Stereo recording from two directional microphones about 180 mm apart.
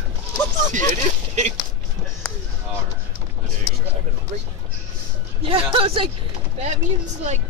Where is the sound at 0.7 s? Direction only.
40° right (ahead or behind).